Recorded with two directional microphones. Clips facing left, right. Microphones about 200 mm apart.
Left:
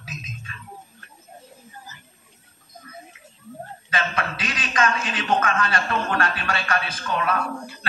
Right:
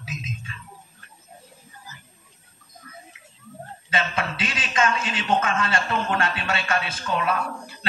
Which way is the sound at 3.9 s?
25° right (ahead or behind).